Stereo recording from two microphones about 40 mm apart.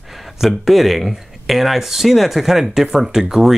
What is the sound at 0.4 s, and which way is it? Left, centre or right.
Speech, centre.